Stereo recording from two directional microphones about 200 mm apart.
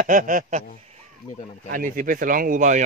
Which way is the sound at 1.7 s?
45° right (ahead or behind).